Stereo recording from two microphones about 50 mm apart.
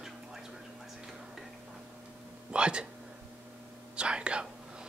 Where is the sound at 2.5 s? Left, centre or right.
Centre.